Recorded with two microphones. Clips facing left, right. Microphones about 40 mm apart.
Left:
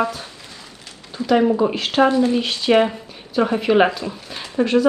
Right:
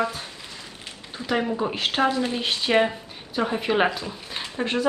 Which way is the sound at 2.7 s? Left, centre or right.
Left.